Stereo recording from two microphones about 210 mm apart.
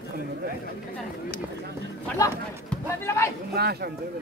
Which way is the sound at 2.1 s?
10° left (ahead or behind).